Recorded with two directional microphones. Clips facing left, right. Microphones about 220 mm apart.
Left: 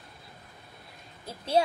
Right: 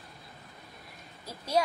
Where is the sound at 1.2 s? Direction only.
30° left (ahead or behind).